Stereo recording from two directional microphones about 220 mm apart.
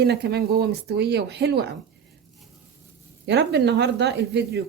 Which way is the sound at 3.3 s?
50° right (ahead or behind).